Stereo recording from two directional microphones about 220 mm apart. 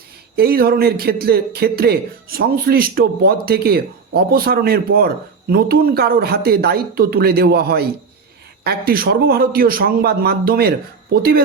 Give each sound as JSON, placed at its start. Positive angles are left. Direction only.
{"t": 0.3, "sound": "speech", "side_deg": -45}